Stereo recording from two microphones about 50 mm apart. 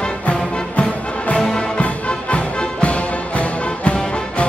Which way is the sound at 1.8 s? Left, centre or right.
Left.